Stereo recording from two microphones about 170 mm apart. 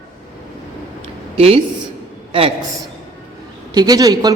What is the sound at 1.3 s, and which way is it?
Speech, 35° right (ahead or behind).